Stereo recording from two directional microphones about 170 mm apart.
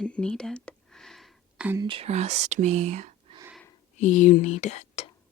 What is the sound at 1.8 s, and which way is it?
Speech, 30° right (ahead or behind).